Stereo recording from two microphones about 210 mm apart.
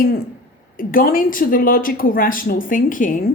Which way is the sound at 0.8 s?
40° left (ahead or behind).